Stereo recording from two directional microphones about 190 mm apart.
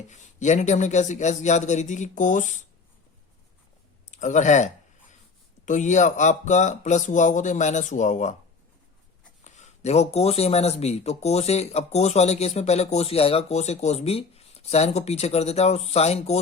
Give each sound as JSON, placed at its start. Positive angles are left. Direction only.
{"t": 0.1, "sound": "speech", "side_deg": 40}
{"t": 4.1, "sound": "speech", "side_deg": 40}
{"t": 9.4, "sound": "speech", "side_deg": 40}